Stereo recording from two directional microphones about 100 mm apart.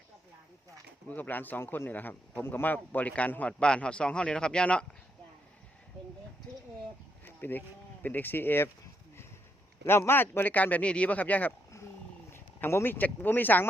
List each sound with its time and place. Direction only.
1.0 s speech: 15° left (ahead or behind)
8.0 s speech: 20° left (ahead or behind)
9.8 s speech: 25° left (ahead or behind)